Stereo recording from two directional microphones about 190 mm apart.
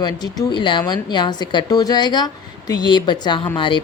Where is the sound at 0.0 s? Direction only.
20° left (ahead or behind).